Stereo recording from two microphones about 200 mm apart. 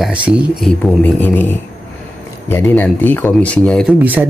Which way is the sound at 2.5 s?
10° left (ahead or behind).